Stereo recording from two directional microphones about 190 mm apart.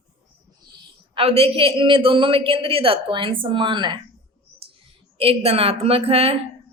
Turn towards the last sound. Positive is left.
turn(degrees=-30)  # may be behind; listen again after turning